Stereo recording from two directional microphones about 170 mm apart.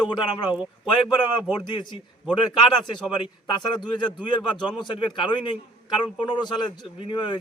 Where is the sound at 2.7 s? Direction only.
25° left (ahead or behind).